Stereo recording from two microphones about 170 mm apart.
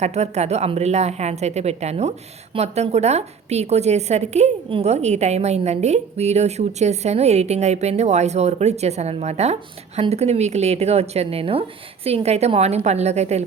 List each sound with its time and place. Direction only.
0.0 s a woman's voice: 40° right (ahead or behind)